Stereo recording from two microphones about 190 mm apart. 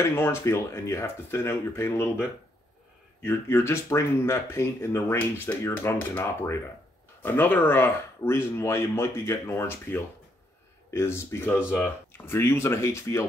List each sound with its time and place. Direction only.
0.1 s speech: 10° left (ahead or behind)